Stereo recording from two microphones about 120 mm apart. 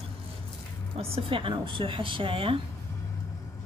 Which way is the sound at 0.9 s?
50° right (ahead or behind).